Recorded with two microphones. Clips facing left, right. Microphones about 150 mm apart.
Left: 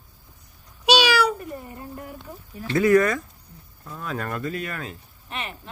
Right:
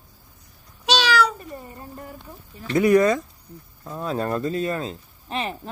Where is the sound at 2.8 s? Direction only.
20° right (ahead or behind).